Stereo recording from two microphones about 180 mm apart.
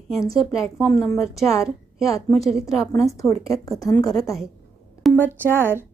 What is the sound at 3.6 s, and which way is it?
Speech, 20° left (ahead or behind).